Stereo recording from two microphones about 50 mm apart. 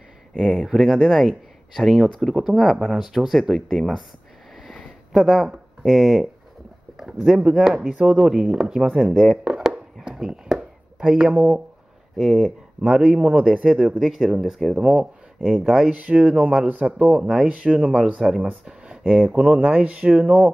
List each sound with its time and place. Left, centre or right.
0.4 s speech: centre
4.6 s a sound: centre
5.2 s speech: centre
7.3 s speech: right
7.6 s speech: centre
10.0 s chopping: centre
11.1 s speech: right
12.2 s speech: centre
12.8 s speech: centre
13.9 s speech: centre
15.9 s speech: right
16.6 s speech: right